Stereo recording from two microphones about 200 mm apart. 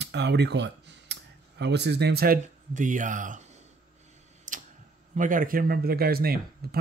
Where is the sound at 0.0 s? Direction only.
60° right (ahead or behind).